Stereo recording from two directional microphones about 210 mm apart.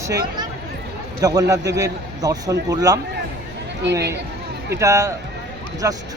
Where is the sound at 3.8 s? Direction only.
55° right (ahead or behind).